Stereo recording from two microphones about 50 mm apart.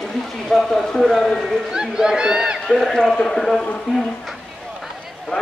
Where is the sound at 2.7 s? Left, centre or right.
Centre.